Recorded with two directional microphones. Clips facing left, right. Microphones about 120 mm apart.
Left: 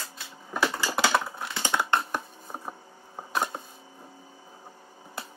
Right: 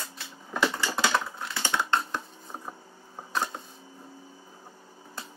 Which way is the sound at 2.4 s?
15° left (ahead or behind).